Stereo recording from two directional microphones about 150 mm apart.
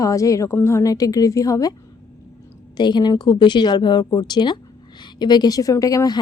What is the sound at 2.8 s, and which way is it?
A woman's voice, 30° left (ahead or behind).